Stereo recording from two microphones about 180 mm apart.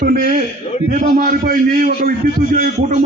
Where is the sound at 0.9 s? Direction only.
45° right (ahead or behind).